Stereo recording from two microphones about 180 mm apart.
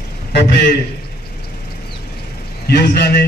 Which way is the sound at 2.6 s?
65° left (ahead or behind).